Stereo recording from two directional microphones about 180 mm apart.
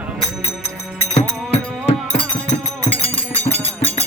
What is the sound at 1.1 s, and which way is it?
Music, 35° left (ahead or behind).